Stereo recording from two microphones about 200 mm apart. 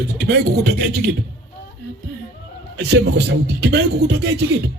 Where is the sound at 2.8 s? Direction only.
60° right (ahead or behind).